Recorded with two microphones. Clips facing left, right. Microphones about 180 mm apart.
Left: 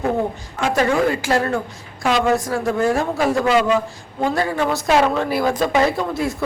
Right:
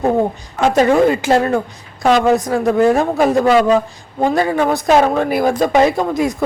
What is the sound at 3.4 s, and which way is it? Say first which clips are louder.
Speech: right 4 dB; 35° right (ahead or behind).